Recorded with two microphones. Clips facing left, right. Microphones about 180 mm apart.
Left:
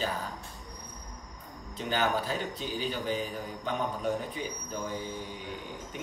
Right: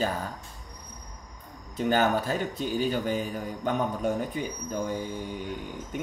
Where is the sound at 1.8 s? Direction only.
50° right (ahead or behind).